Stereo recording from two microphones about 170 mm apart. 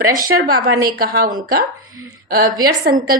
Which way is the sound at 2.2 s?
60° right (ahead or behind).